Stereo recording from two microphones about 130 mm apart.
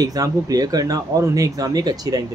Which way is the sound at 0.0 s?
25° right (ahead or behind).